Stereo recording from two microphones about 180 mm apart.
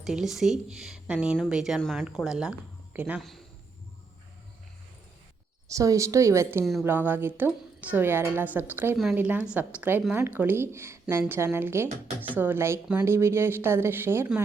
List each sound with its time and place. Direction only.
0.0 s speech: centre (ahead or behind)
5.6 s a woman's voice: 20° right (ahead or behind)